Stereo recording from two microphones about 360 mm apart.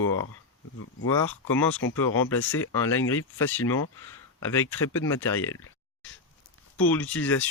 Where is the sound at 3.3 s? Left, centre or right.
Centre.